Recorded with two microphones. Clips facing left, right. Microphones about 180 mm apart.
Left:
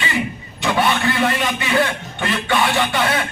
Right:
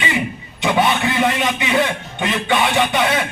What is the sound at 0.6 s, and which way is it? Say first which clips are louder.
Speech: right 1 dB; 20° right (ahead or behind).